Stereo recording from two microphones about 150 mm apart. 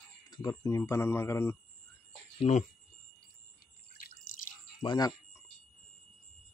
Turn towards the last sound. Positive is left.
turn(degrees=30)  # may be behind; listen again after turning